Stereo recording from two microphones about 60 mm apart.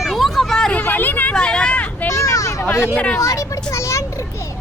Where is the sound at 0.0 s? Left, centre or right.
Centre.